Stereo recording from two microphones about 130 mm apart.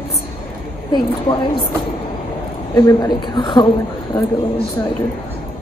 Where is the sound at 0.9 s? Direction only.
35° left (ahead or behind).